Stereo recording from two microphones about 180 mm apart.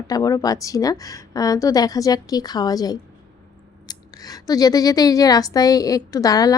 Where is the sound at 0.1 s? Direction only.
20° left (ahead or behind).